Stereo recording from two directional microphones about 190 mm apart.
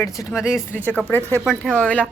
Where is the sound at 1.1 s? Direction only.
10° left (ahead or behind).